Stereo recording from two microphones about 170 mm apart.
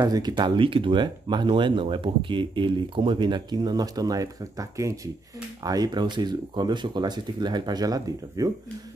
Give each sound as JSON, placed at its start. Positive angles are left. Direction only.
{"t": 0.0, "sound": "speech", "side_deg": -25}